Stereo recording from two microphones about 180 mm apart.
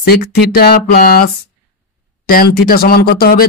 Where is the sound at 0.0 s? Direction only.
60° left (ahead or behind).